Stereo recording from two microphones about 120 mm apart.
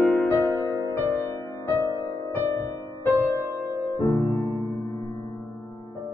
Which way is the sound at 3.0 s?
15° left (ahead or behind).